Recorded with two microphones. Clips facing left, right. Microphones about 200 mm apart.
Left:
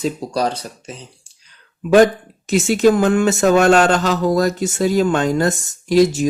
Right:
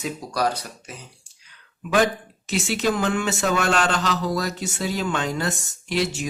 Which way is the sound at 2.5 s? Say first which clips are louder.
Left 10 dB; 45° left (ahead or behind).